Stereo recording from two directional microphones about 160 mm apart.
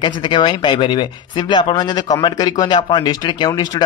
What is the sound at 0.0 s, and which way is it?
A man's voice, 30° left (ahead or behind).